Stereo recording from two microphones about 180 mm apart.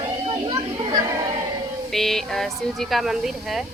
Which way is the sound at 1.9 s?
Centre (ahead or behind).